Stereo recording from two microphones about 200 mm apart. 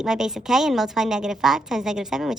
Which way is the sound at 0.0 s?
Centre (ahead or behind).